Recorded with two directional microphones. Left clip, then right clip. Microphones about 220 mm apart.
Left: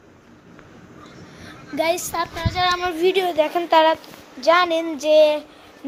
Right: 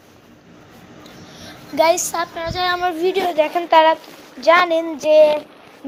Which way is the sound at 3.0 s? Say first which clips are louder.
Left 1 dB; 10° left (ahead or behind).